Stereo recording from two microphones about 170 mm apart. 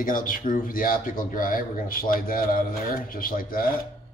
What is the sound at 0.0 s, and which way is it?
A man's voice, 55° left (ahead or behind).